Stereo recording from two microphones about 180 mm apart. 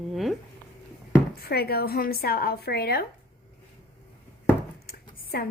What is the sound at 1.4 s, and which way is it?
A woman's voice, 60° left (ahead or behind).